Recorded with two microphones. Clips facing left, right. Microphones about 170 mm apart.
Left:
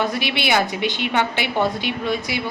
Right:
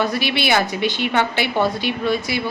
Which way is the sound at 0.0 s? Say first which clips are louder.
Right 2 dB; 20° left (ahead or behind).